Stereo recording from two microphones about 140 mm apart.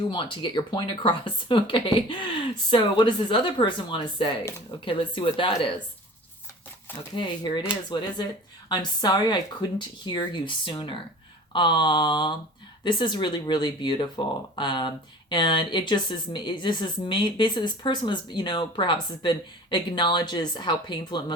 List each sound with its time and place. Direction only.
0.1 s speech: 35° left (ahead or behind)
7.2 s speech: 35° left (ahead or behind)